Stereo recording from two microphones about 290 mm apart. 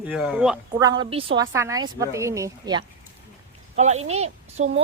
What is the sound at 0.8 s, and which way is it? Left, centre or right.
A woman's voice, centre.